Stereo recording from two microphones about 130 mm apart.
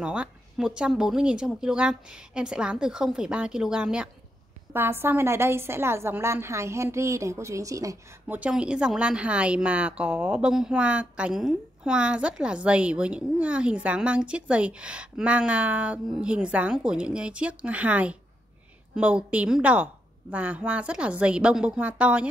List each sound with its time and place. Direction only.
0.0 s a woman's voice: 10° right (ahead or behind)
4.7 s a woman's voice: 15° right (ahead or behind)
8.3 s a woman's voice: 10° right (ahead or behind)